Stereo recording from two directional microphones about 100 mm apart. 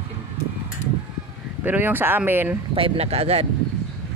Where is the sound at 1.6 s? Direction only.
20° right (ahead or behind).